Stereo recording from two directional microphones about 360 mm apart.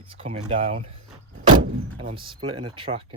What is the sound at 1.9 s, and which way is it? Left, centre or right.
Speech, centre.